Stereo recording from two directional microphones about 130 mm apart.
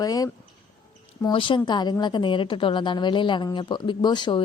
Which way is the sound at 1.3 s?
40° left (ahead or behind).